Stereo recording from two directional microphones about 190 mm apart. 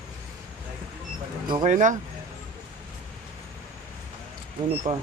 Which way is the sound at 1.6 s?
40° right (ahead or behind).